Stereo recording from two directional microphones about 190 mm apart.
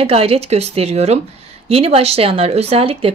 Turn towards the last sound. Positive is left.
turn(degrees=-30)  # may be behind; listen again after turning